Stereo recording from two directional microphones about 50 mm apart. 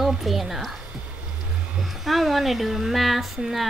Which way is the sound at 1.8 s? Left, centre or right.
Centre.